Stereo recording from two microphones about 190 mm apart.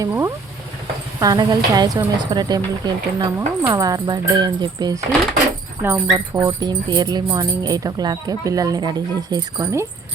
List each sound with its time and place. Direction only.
0.0 s speech: 15° right (ahead or behind)